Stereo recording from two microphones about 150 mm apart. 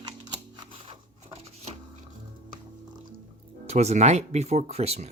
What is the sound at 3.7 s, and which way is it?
Speech, 50° right (ahead or behind).